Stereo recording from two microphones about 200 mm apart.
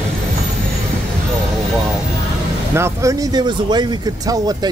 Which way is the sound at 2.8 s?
15° right (ahead or behind).